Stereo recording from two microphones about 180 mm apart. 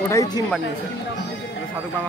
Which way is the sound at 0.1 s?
20° left (ahead or behind).